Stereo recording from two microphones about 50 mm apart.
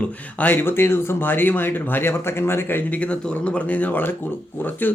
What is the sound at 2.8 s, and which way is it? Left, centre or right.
A man's voice, left.